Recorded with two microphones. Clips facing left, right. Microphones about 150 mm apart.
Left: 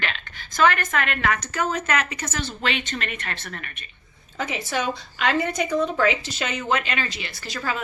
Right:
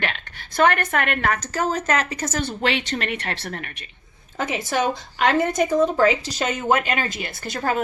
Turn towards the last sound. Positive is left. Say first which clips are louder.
# right 5 dB
turn(degrees=-50)  # may be behind; listen again after turning